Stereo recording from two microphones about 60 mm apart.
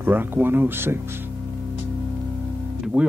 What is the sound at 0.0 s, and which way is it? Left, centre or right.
Speech, right.